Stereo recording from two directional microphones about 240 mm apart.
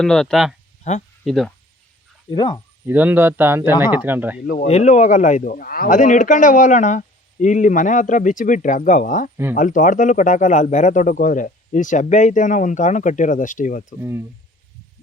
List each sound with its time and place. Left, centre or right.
0.0 s speech: centre
0.9 s speech: left
1.2 s speech: centre
2.3 s speech: centre
2.8 s a man's voice: centre
4.4 s speech: left
14.0 s a man's voice: centre